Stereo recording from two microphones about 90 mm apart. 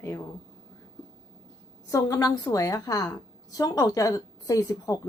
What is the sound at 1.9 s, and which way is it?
A woman's voice, 40° left (ahead or behind).